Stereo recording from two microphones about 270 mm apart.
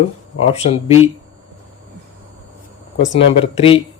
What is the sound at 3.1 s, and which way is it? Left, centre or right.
Speech, left.